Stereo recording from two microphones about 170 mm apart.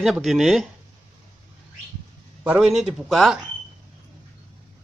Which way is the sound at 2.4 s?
5° right (ahead or behind).